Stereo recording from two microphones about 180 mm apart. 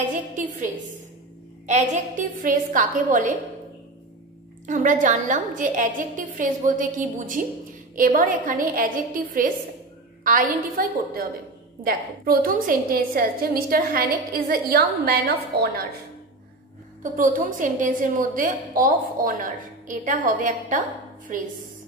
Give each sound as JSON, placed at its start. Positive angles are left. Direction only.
{"t": 1.7, "sound": "a woman's voice", "side_deg": -40}
{"t": 4.6, "sound": "a woman's voice", "side_deg": -45}
{"t": 17.0, "sound": "a woman's voice", "side_deg": -45}